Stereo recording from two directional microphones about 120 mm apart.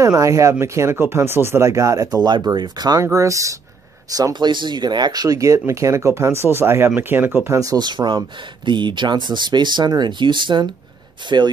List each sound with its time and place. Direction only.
0.0 s speech: 25° right (ahead or behind)
7.5 s speech: 30° right (ahead or behind)